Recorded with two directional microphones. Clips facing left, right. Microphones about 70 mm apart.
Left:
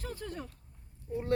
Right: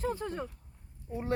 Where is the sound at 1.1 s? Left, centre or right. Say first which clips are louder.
Left 1 dB; centre.